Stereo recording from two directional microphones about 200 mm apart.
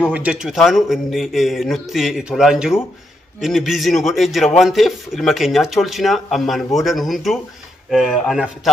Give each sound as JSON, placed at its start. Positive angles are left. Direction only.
{"t": 0.1, "sound": "a man's voice", "side_deg": -5}